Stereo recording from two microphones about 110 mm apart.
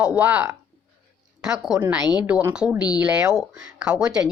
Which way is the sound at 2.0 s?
40° left (ahead or behind).